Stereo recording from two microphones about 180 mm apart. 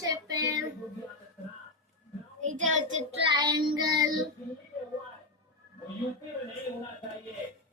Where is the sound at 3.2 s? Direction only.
20° right (ahead or behind).